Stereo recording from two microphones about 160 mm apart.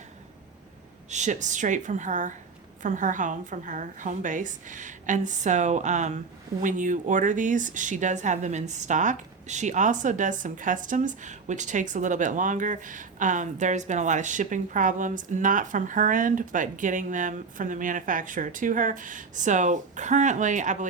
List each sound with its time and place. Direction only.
1.1 s a woman's voice: 50° right (ahead or behind)